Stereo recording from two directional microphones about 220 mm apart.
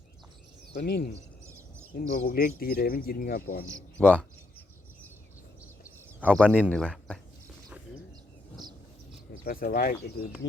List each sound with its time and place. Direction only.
0.9 s speech: 45° left (ahead or behind)
3.7 s speech: 15° right (ahead or behind)
4.0 s speech: 5° left (ahead or behind)
6.3 s speech: 5° left (ahead or behind)
9.4 s speech: 40° left (ahead or behind)